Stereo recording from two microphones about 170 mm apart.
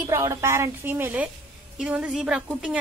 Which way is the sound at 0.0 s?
20° right (ahead or behind).